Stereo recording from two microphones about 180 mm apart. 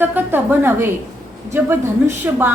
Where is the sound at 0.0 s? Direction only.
10° right (ahead or behind).